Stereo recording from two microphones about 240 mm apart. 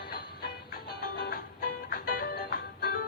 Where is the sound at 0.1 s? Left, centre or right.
Left.